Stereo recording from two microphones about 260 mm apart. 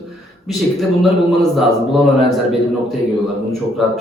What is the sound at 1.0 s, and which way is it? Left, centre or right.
Speech, centre.